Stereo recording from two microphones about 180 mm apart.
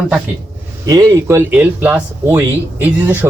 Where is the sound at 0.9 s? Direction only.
20° right (ahead or behind).